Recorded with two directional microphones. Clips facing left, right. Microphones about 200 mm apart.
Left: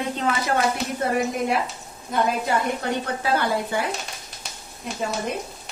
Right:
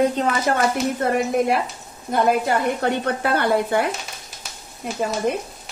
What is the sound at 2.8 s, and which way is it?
Speech, 60° right (ahead or behind).